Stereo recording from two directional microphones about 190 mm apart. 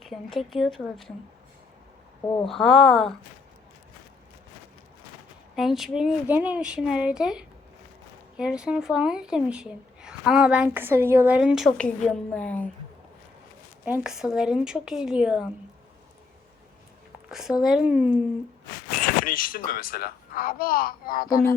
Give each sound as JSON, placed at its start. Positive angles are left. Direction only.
{"t": 0.0, "sound": "speech", "side_deg": 0}
{"t": 2.5, "sound": "speech", "side_deg": 0}
{"t": 5.5, "sound": "speech", "side_deg": 0}
{"t": 13.8, "sound": "speech", "side_deg": -5}
{"t": 17.2, "sound": "speech", "side_deg": -5}
{"t": 19.0, "sound": "a child's voice", "side_deg": 50}